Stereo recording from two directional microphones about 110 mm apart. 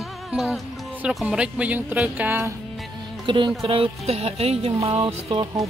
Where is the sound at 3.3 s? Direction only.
45° right (ahead or behind).